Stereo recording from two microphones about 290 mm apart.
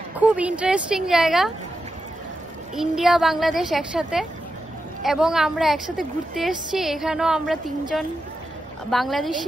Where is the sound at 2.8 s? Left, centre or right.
Centre.